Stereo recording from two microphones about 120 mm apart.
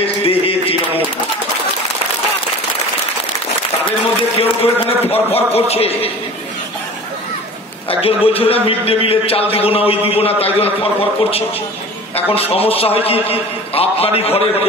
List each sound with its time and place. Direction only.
0.0 s a sound: 55° left (ahead or behind)
4.2 s a man's voice: 50° left (ahead or behind)
7.9 s a man's voice: 50° left (ahead or behind)